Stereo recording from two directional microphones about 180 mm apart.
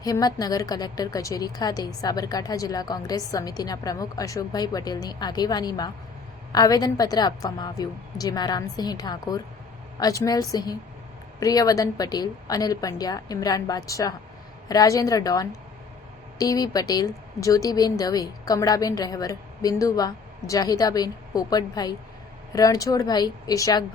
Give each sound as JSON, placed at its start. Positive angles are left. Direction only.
{"t": 0.0, "sound": "a woman's voice", "side_deg": 20}